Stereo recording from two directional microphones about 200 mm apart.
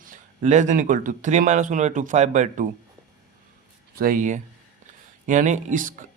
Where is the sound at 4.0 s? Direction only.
40° right (ahead or behind).